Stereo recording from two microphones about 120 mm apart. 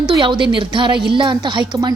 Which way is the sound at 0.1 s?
40° right (ahead or behind).